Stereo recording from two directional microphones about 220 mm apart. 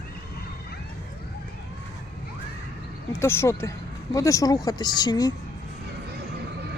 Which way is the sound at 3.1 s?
10° left (ahead or behind).